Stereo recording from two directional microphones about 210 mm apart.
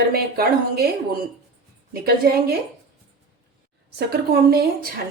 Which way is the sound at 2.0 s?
45° right (ahead or behind).